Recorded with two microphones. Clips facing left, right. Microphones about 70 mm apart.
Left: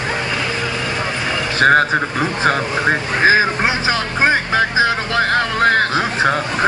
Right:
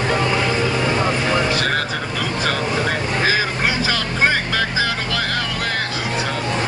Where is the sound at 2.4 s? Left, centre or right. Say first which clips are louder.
Left 4 dB; left.